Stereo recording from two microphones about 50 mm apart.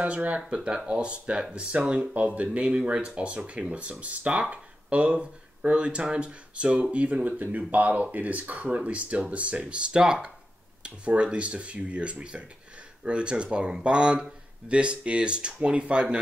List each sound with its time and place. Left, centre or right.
0.0 s speech: right